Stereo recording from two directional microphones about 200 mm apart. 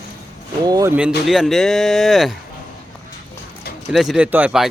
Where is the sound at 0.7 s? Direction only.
20° right (ahead or behind).